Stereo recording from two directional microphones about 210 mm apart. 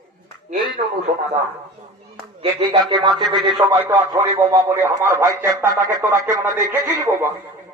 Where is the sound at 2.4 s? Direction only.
25° right (ahead or behind).